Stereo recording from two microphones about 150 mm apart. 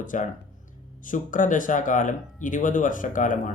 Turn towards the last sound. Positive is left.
turn(degrees=60)  # may be behind; listen again after turning